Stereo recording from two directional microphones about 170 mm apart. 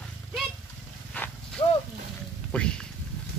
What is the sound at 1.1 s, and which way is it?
Dog, 10° left (ahead or behind).